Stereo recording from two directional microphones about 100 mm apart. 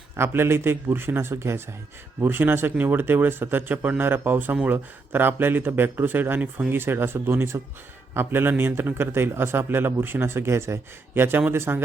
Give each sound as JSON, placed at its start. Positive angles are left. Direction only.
{"t": 0.2, "sound": "a man's voice", "side_deg": -25}